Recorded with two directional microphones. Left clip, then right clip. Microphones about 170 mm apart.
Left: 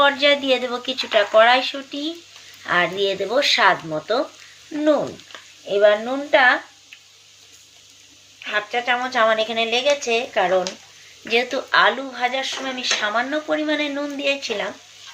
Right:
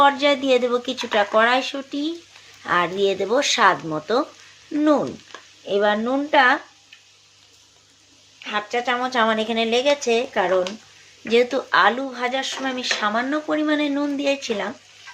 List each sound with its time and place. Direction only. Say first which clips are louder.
0.0 s speech: even; 60° right (ahead or behind)
5.6 s speech: left 4 dB; 65° right (ahead or behind)
8.4 s speech: left 1 dB; 70° right (ahead or behind)